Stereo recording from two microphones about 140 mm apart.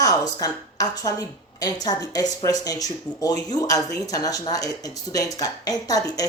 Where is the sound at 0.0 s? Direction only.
25° left (ahead or behind).